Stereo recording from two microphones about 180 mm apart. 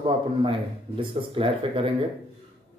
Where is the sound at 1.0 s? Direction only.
30° right (ahead or behind).